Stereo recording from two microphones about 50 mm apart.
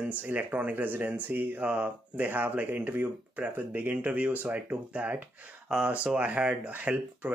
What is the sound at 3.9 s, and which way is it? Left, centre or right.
Speech, right.